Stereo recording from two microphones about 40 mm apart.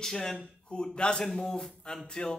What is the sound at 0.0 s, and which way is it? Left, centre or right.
A man's voice, centre.